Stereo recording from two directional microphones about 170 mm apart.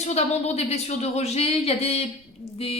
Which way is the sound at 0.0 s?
40° left (ahead or behind).